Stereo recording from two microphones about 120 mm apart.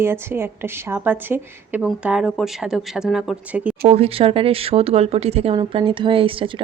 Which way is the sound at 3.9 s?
55° right (ahead or behind).